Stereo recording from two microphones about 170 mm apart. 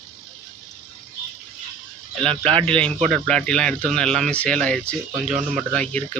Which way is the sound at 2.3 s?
35° right (ahead or behind).